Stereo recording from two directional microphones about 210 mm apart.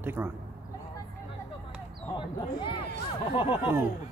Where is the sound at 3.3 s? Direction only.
25° left (ahead or behind).